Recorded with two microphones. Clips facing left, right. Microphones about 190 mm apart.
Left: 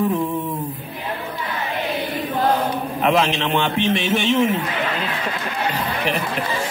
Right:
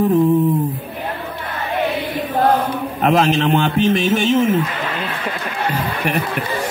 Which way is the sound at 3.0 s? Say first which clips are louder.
Right 4 dB; 40° right (ahead or behind).